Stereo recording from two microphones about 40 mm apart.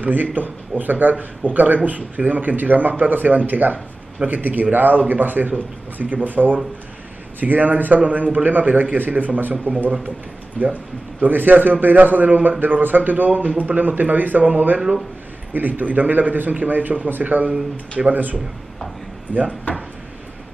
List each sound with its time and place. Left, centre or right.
0.0 s a man's voice: right
19.3 s speech: left